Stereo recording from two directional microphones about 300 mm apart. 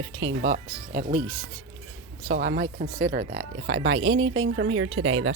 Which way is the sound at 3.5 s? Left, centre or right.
Right.